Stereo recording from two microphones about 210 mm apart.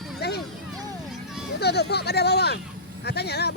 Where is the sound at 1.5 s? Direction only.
50° left (ahead or behind).